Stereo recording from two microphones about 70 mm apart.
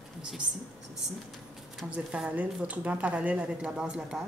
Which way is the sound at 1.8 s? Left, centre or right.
Centre.